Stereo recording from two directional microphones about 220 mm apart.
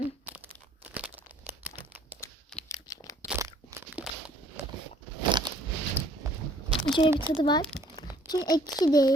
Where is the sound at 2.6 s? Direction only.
15° left (ahead or behind).